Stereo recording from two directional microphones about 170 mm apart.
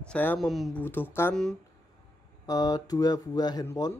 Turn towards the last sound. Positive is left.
turn(degrees=20)  # may be behind; listen again after turning